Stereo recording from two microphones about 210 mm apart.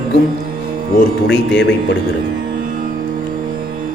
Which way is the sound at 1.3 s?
55° left (ahead or behind).